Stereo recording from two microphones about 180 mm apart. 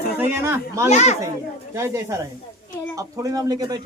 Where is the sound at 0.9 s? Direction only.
40° left (ahead or behind).